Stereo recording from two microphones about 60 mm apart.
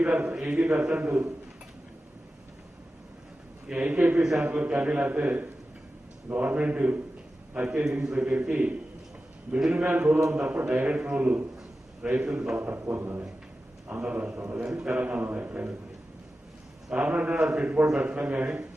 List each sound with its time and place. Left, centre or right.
0.0 s a man's voice: right
3.7 s a man's voice: centre
4.2 s speech: centre
4.4 s a man's voice: right
9.6 s speech: centre
9.8 s a man's voice: right
12.1 s a man's voice: centre
12.9 s speech: right
13.8 s a man's voice: centre
14.7 s a man's voice: centre
14.9 s a man's voice: right
16.9 s a man's voice: right